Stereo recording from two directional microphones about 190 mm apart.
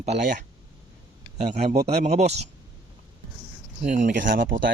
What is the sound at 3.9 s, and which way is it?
Speech, 45° right (ahead or behind).